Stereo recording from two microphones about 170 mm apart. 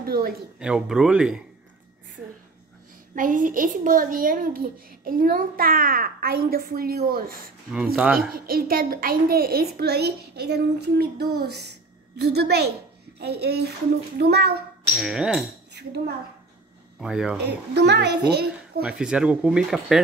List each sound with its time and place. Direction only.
0.0 s speech: 60° right (ahead or behind)
0.6 s speech: 5° right (ahead or behind)
3.2 s a child's voice: 50° right (ahead or behind)
7.7 s speech: 5° right (ahead or behind)
8.3 s a child's voice: 60° right (ahead or behind)
15.0 s speech: 5° right (ahead or behind)
15.8 s a child's voice: 75° right (ahead or behind)
17.0 s speech: 5° right (ahead or behind)
17.4 s a child's voice: 80° right
18.8 s speech: 5° right (ahead or behind)